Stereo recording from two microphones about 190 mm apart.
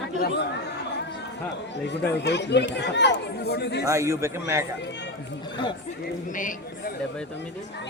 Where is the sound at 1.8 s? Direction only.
65° left (ahead or behind).